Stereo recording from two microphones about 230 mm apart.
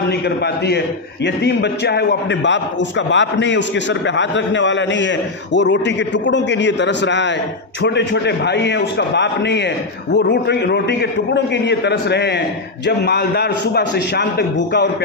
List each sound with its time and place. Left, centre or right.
0.4 s a man's voice: left